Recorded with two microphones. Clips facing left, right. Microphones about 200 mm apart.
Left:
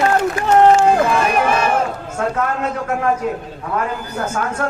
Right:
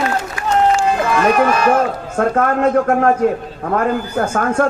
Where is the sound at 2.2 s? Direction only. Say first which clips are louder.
Right 6 dB; 55° right (ahead or behind).